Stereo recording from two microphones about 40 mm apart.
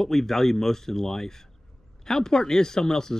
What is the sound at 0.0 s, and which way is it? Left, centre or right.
Speech, centre.